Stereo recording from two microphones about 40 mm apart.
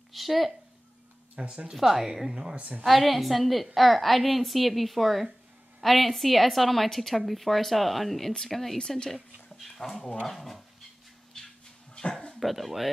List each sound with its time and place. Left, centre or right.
0.1 s a woman's voice: centre
1.3 s speech: right
1.8 s a woman's voice: centre
2.5 s a woman's voice: right
2.8 s a woman's voice: centre
8.7 s speech: centre
9.1 s a woman's voice: centre
11.4 s a sound: centre
12.4 s a woman's voice: centre